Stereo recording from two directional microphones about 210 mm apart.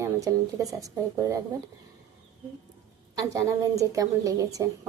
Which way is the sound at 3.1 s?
15° right (ahead or behind).